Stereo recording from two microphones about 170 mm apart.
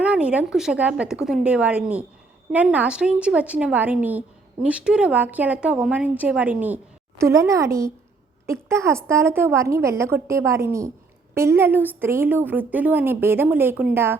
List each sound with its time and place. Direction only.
0.0 s a woman's voice: 5° right (ahead or behind)